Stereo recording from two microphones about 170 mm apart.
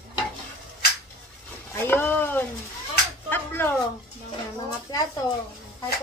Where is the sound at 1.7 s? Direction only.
15° left (ahead or behind).